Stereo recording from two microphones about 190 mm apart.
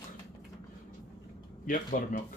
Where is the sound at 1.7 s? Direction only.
45° left (ahead or behind).